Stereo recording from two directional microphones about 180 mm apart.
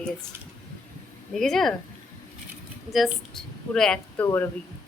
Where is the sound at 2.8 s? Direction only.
Centre (ahead or behind).